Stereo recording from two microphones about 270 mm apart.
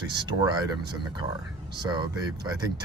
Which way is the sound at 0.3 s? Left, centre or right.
Centre.